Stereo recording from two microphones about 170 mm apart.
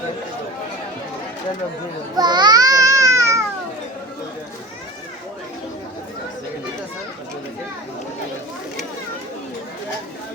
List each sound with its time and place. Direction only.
2.1 s babbling: 25° right (ahead or behind)